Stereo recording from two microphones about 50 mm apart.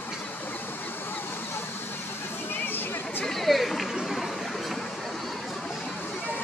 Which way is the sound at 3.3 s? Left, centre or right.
Centre.